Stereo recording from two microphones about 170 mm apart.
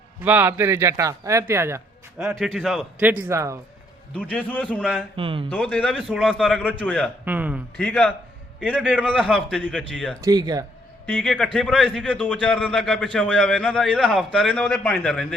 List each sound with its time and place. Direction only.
0.3 s a man's voice: 15° right (ahead or behind)
2.4 s a man's voice: centre (ahead or behind); by 3.6 s 15° right (ahead or behind)
4.1 s a man's voice: 10° left (ahead or behind)
5.1 s speech: 30° right (ahead or behind)
5.6 s a man's voice: 5° left (ahead or behind)
7.3 s a man's voice: 10° right (ahead or behind)
7.8 s a man's voice: 5° left (ahead or behind)
10.2 s speech: 20° right (ahead or behind)
11.0 s a man's voice: 10° left (ahead or behind)